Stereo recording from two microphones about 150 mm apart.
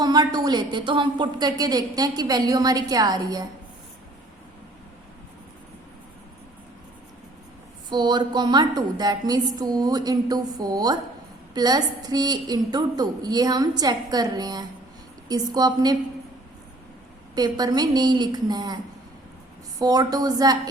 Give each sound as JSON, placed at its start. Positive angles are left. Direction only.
{"t": 0.0, "sound": "a woman's voice", "side_deg": -25}
{"t": 7.9, "sound": "a woman's voice", "side_deg": -30}
{"t": 17.3, "sound": "a woman's voice", "side_deg": -25}
{"t": 19.8, "sound": "a woman's voice", "side_deg": -25}